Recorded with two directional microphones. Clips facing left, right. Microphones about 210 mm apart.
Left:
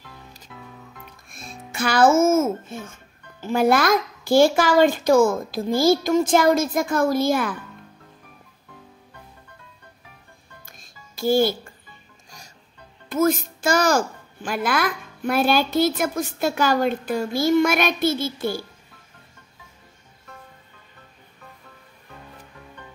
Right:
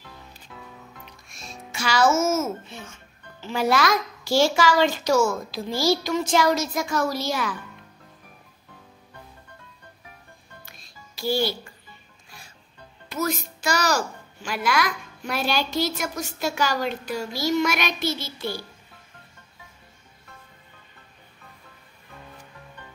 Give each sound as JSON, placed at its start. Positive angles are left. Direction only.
{"t": 1.0, "sound": "a child's voice", "side_deg": 55}
{"t": 10.8, "sound": "music", "side_deg": 50}
{"t": 13.1, "sound": "a child's voice", "side_deg": 50}